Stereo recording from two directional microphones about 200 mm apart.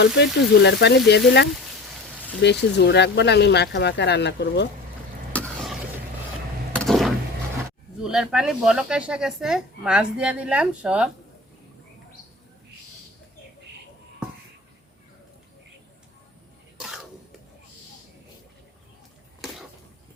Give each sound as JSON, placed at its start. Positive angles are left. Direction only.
{"t": 0.0, "sound": "speech", "side_deg": 60}
{"t": 2.4, "sound": "speech", "side_deg": 60}
{"t": 5.3, "sound": "vehicle", "side_deg": 5}
{"t": 6.7, "sound": "a sound", "side_deg": 0}
{"t": 8.0, "sound": "speech", "side_deg": -5}
{"t": 16.7, "sound": "cough", "side_deg": 0}